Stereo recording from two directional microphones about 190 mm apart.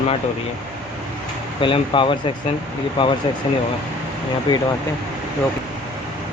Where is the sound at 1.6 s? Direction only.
25° left (ahead or behind).